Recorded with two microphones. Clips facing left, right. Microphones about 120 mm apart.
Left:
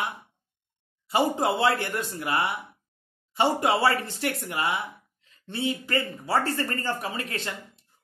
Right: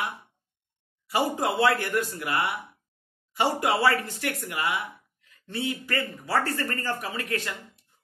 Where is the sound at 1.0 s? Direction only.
25° left (ahead or behind).